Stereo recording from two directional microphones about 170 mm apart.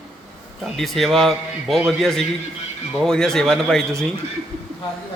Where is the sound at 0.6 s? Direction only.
Centre (ahead or behind).